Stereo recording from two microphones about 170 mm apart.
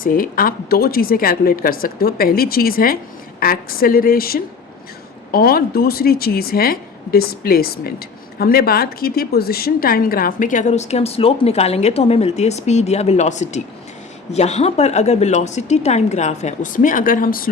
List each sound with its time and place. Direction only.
0.0 s a woman's voice: 55° left (ahead or behind)